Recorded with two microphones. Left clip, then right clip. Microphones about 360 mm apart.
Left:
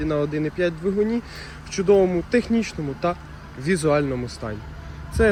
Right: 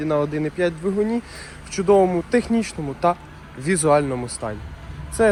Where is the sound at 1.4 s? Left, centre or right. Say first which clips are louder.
Even; centre.